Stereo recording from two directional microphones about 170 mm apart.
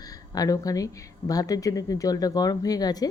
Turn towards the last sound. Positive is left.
turn(degrees=20)  # may be behind; listen again after turning